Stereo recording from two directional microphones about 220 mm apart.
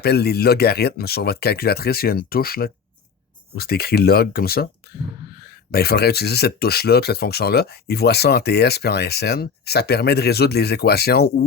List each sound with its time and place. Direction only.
0.0 s speech: 45° left (ahead or behind)